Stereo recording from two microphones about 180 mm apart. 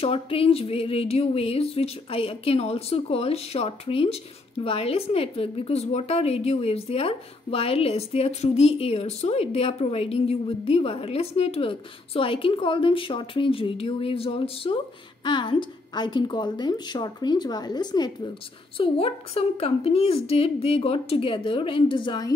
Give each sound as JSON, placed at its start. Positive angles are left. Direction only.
{"t": 0.0, "sound": "a woman's voice", "side_deg": 30}